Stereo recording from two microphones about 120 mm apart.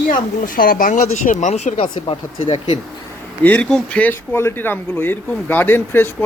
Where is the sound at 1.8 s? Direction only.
50° left (ahead or behind).